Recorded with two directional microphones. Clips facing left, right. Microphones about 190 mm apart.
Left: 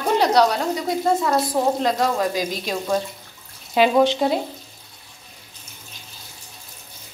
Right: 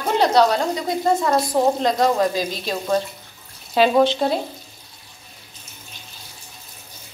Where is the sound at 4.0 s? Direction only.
15° left (ahead or behind).